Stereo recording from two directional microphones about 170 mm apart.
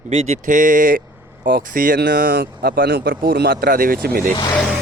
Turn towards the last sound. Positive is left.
turn(degrees=5)  # may be behind; listen again after turning